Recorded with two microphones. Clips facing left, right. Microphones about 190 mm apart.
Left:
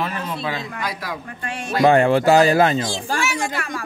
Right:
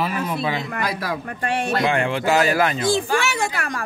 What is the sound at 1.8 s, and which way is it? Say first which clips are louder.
Speech: left 11 dB; 40° left (ahead or behind).